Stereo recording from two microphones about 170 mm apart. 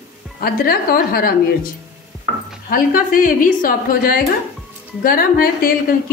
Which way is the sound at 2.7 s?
55° left (ahead or behind).